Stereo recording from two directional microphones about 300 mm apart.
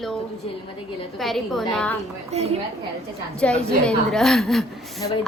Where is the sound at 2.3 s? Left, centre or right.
Right.